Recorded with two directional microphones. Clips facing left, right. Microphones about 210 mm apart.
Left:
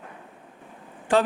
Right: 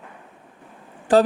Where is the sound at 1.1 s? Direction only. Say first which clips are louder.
Right 5 dB; 35° right (ahead or behind).